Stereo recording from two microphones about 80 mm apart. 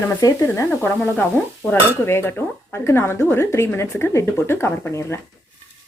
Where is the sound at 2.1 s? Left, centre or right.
Left.